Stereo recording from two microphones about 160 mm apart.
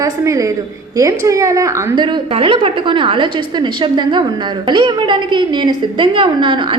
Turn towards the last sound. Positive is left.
turn(degrees=-30)  # may be behind; listen again after turning